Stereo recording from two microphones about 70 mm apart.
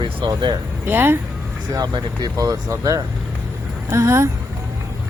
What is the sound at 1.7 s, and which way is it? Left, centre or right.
Speech, right.